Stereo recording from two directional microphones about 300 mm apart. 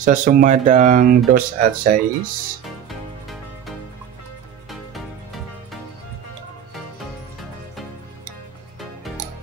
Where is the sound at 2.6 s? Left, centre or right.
Centre.